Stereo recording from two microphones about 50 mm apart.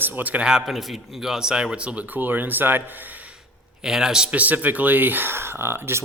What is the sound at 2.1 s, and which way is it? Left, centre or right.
Speech, right.